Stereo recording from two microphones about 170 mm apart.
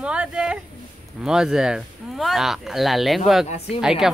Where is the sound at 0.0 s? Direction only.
5° right (ahead or behind).